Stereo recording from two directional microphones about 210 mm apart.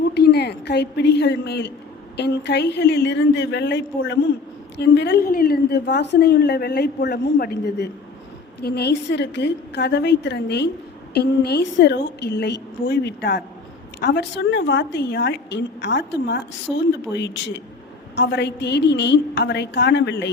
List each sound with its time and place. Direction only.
0.1 s a woman's voice: 50° left (ahead or behind)